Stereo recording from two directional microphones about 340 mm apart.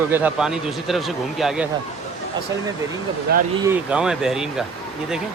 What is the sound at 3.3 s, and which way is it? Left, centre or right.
Speech, right.